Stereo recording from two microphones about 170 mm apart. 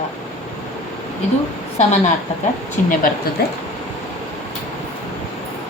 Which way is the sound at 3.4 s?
70° left (ahead or behind).